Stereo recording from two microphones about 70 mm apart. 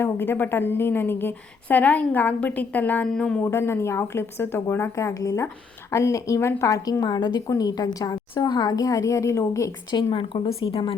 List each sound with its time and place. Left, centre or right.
0.0 s speech: left
1.6 s a woman's voice: left
3.1 s a man's voice: centre
3.4 s speech: left
4.9 s a woman's voice: left
7.0 s a woman's voice: left
7.4 s speech: left
7.8 s a woman's voice: left
10.3 s a woman's voice: left